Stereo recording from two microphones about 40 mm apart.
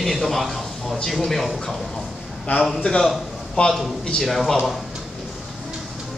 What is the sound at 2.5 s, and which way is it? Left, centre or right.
Speech, left.